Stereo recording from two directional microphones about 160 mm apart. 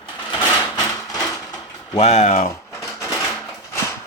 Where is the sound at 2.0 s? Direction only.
45° left (ahead or behind).